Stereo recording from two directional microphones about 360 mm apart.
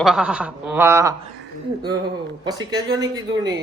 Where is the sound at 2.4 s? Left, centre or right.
Centre.